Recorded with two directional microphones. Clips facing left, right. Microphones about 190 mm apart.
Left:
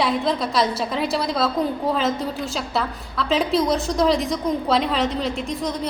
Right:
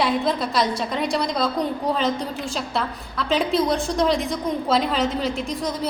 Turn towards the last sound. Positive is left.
turn(degrees=0)  # may be behind; listen again after turning